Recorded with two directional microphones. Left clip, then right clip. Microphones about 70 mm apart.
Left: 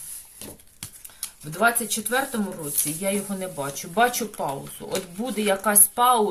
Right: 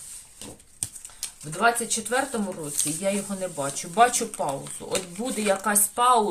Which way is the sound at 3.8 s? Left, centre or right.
Centre.